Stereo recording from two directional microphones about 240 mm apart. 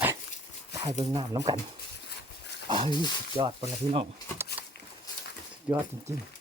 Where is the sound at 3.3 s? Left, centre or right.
Right.